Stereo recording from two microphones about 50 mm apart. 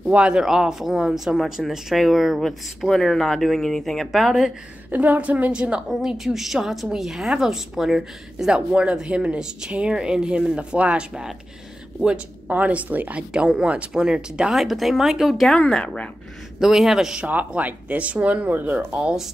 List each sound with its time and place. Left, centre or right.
0.0 s speech: right
0.4 s speech: centre
2.4 s speech: centre
4.9 s speech: right
6.0 s speech: centre
8.5 s speech: right
12.4 s speech: right
13.3 s speech: centre
14.5 s speech: centre
15.4 s speech: centre
16.5 s speech: centre
17.2 s speech: right